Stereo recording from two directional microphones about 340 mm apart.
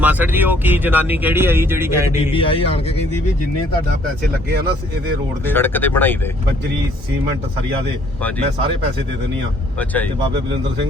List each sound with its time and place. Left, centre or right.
0.0 s speech: centre
2.3 s a man's voice: centre
5.5 s speech: centre